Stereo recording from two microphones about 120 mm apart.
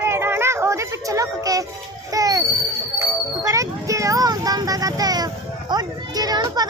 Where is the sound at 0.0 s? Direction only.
20° right (ahead or behind).